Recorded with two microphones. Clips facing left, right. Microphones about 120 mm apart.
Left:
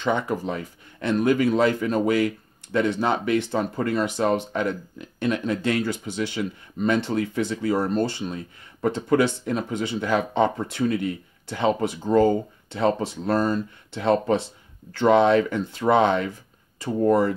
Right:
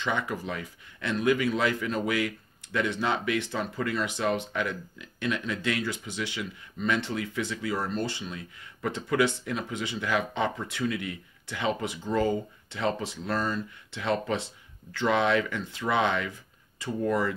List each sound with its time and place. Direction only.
0.0 s speech: 35° left (ahead or behind)